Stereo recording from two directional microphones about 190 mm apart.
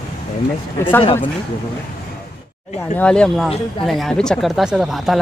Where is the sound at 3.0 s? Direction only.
5° left (ahead or behind).